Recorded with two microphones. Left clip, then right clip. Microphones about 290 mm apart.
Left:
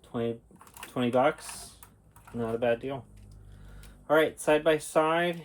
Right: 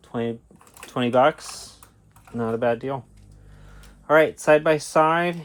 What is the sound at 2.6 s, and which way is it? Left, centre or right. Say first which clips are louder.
Speech: right 4 dB; right.